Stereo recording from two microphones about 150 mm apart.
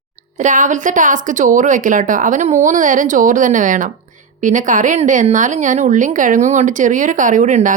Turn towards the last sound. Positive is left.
turn(degrees=-60)  # may be behind; listen again after turning